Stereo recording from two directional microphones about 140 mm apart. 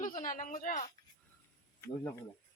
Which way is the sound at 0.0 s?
70° left (ahead or behind).